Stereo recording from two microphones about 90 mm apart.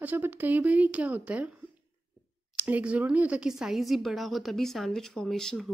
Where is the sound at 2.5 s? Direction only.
15° right (ahead or behind); by 5.7 s 5° left (ahead or behind).